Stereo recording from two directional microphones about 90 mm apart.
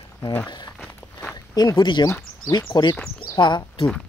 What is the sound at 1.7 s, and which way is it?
Speech, 60° left (ahead or behind).